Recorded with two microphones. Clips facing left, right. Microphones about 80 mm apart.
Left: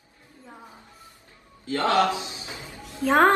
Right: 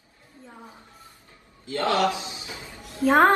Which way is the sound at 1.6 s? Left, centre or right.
Left.